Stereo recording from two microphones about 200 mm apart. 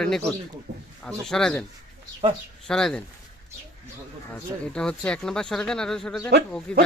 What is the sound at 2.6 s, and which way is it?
Speech, 5° left (ahead or behind).